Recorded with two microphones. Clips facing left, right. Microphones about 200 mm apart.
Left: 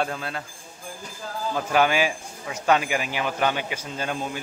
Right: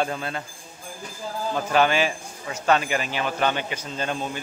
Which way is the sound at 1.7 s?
10° left (ahead or behind).